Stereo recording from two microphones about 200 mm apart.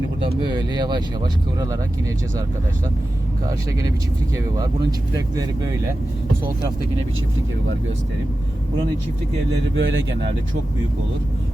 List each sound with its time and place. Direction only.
0.2 s speech: 25° right (ahead or behind)
4.5 s speech: 20° right (ahead or behind)
9.7 s speech: 65° right (ahead or behind)